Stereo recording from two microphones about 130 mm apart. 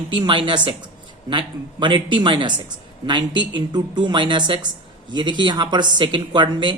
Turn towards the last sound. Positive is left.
turn(degrees=-35)  # may be behind; listen again after turning